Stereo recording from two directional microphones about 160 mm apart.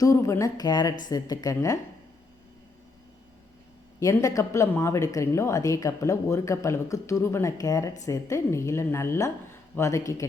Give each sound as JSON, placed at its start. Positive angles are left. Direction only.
{"t": 0.0, "sound": "speech", "side_deg": 20}
{"t": 4.0, "sound": "a woman's voice", "side_deg": 20}